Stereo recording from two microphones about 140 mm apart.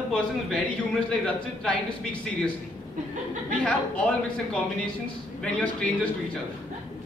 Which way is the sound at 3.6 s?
10° left (ahead or behind).